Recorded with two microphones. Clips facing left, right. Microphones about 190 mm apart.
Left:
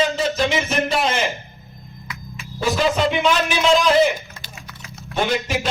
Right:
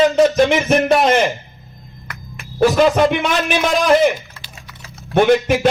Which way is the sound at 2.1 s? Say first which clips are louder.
Even; 60° right (ahead or behind).